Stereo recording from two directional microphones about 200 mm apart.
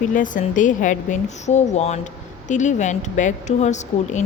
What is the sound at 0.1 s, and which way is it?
Speech, 40° left (ahead or behind).